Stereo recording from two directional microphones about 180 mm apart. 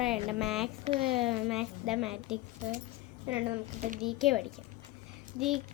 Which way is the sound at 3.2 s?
10° right (ahead or behind).